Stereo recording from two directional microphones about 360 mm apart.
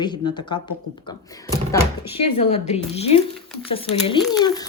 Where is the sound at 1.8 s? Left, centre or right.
Centre.